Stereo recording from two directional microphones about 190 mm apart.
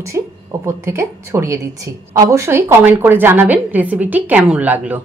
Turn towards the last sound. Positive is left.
turn(degrees=-10)  # may be behind; listen again after turning